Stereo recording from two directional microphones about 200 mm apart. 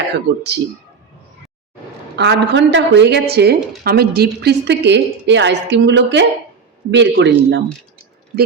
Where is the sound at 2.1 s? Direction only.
60° right (ahead or behind).